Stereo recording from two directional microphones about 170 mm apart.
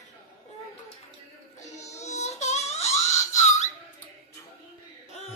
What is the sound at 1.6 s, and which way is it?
Music, 40° left (ahead or behind).